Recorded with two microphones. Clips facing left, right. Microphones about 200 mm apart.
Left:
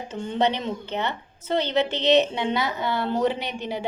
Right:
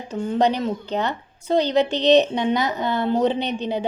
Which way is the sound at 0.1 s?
10° right (ahead or behind).